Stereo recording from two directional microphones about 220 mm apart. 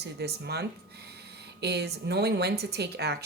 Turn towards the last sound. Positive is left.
turn(degrees=-45)  # may be behind; listen again after turning